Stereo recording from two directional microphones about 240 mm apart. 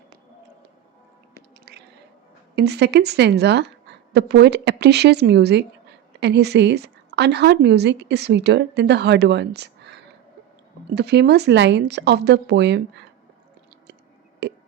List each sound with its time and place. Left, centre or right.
1.7 s squish: right
2.6 s speech: right
14.4 s music: right